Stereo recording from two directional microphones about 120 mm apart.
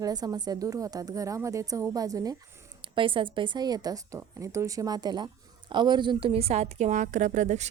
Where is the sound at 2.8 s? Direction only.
45° right (ahead or behind).